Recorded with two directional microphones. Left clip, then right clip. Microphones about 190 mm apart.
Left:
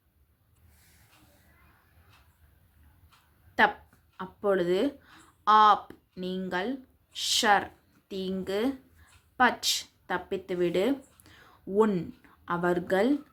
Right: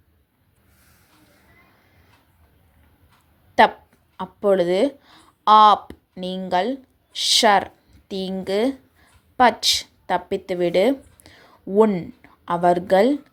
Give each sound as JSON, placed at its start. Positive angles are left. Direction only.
{"t": 3.6, "sound": "a woman's voice", "side_deg": -25}